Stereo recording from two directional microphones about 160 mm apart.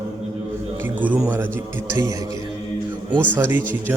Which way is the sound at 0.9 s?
10° right (ahead or behind).